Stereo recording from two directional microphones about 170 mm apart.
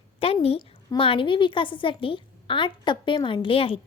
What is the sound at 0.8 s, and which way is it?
A woman's voice, 30° left (ahead or behind).